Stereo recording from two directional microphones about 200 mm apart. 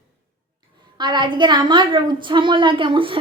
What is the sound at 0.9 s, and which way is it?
A woman's voice, 25° right (ahead or behind).